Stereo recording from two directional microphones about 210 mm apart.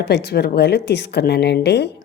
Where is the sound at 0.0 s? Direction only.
50° left (ahead or behind).